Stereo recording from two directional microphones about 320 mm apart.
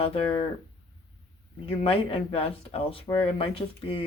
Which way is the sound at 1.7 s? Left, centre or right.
Centre.